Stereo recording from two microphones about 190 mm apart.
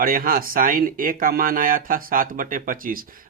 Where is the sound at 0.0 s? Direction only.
50° right (ahead or behind).